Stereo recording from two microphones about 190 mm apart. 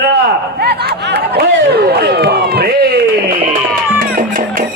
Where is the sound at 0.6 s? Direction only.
55° right (ahead or behind).